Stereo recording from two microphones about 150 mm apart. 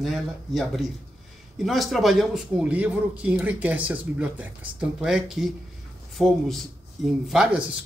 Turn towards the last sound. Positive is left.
turn(degrees=-5)  # may be behind; listen again after turning